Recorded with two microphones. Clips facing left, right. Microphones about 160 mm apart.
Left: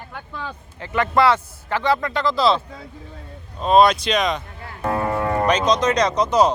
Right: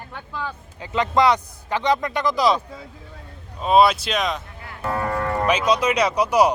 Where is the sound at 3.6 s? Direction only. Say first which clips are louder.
Left 1 dB; 5° right (ahead or behind).